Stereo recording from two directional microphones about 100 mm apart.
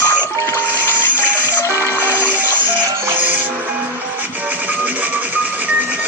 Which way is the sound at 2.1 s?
20° right (ahead or behind).